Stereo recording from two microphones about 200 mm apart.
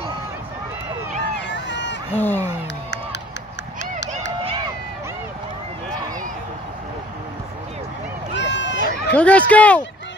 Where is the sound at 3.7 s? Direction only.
65° left (ahead or behind).